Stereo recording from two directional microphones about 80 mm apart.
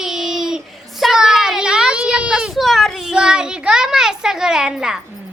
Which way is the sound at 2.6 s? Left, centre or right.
Centre.